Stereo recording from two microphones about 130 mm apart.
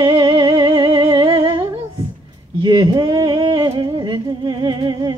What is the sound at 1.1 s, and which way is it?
Humming, 35° right (ahead or behind).